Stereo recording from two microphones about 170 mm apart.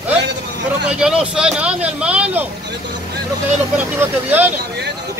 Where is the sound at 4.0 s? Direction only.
10° right (ahead or behind).